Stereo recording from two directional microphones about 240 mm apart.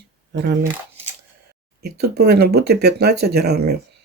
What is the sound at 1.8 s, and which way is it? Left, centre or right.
Speech, right.